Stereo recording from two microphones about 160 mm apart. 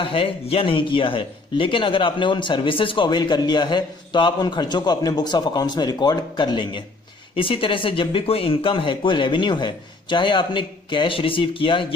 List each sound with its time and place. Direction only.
0.0 s speech: 35° left (ahead or behind)